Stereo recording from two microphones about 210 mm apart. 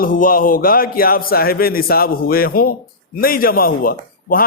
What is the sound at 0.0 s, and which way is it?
A man's voice, 40° left (ahead or behind).